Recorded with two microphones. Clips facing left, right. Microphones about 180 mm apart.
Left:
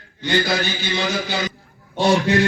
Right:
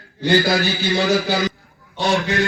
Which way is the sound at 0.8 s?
40° right (ahead or behind).